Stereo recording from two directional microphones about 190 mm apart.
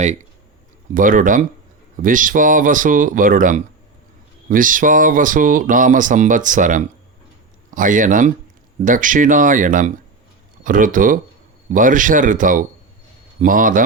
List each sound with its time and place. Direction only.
0.9 s speech: 45° right (ahead or behind)